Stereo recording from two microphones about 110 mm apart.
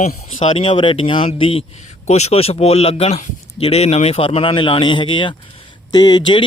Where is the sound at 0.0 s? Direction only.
90° left.